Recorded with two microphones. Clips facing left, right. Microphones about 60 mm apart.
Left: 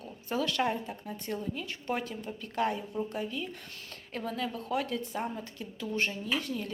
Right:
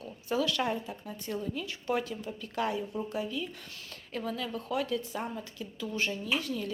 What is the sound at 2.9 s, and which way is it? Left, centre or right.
Speech, centre.